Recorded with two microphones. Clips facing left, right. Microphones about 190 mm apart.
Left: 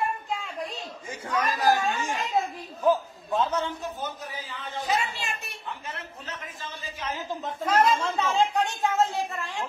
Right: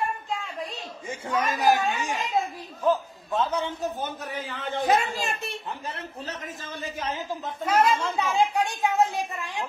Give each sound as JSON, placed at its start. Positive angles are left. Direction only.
{"t": 0.3, "sound": "a sound", "side_deg": 0}
{"t": 1.3, "sound": "a woman's voice", "side_deg": -20}
{"t": 2.8, "sound": "a man's voice", "side_deg": 5}
{"t": 4.0, "sound": "a man's voice", "side_deg": -60}
{"t": 5.4, "sound": "a woman's voice", "side_deg": -35}
{"t": 7.4, "sound": "a woman's voice", "side_deg": -10}